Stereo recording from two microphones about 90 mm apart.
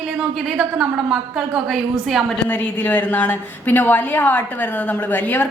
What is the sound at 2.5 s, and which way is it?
A woman's voice, 15° left (ahead or behind).